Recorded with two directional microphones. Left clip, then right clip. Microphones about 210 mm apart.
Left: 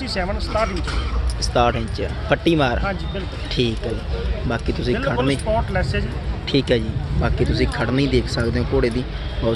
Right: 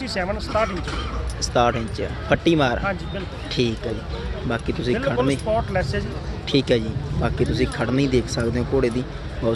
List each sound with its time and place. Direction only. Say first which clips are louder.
0.0 s speech: left 1 dB; 15° right (ahead or behind)
1.4 s speech: left 1 dB; centre (ahead or behind)
5.0 s speech: left 1 dB; 10° right (ahead or behind)
6.5 s speech: left 1 dB; 5° right (ahead or behind)